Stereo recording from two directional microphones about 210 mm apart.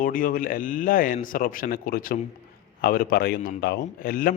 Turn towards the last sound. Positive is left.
turn(degrees=45)  # may be behind; listen again after turning